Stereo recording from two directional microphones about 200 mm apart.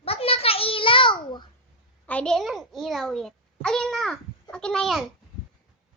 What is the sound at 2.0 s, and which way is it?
A child's voice, 5° left (ahead or behind).